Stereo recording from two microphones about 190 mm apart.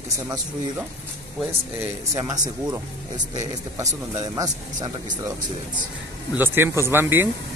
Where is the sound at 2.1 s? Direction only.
20° right (ahead or behind).